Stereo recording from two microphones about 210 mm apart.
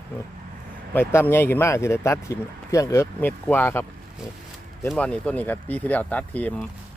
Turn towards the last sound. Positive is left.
turn(degrees=5)  # may be behind; listen again after turning